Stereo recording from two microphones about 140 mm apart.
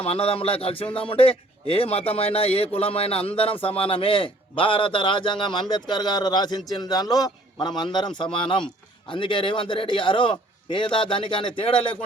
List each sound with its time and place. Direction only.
0.0 s speech: 45° left (ahead or behind)